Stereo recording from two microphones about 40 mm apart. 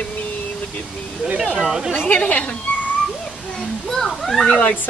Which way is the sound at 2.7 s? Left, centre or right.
Left.